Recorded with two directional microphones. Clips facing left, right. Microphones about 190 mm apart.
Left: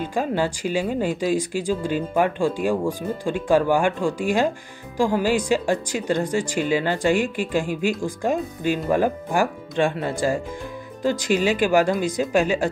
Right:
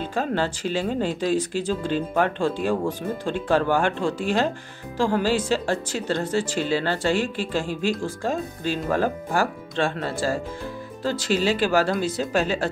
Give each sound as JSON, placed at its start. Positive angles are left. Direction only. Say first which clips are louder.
{"t": 0.0, "sound": "speech", "louder": "left 2 dB", "side_deg": 10}